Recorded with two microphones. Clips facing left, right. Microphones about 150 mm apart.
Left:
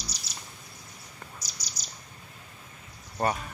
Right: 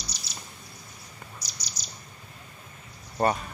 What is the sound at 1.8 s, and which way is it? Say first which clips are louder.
Bird: right 2 dB; 45° left (ahead or behind).